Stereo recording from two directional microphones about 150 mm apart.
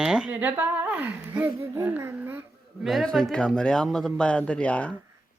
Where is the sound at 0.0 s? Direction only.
5° right (ahead or behind).